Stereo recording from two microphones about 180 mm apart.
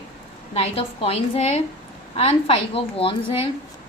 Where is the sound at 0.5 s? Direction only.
35° left (ahead or behind).